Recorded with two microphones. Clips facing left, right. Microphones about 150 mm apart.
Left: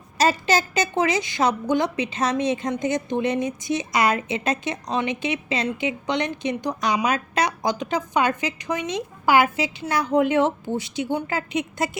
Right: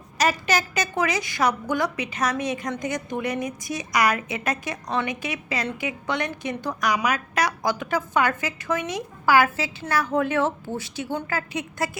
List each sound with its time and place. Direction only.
0.2 s a woman's voice: 30° left (ahead or behind)